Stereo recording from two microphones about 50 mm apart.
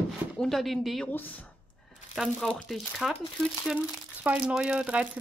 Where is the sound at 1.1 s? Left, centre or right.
Left.